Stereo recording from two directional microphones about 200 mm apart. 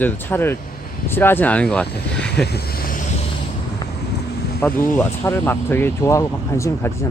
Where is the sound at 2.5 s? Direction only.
50° left (ahead or behind).